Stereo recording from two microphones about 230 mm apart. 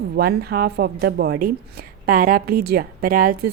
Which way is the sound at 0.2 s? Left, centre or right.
Right.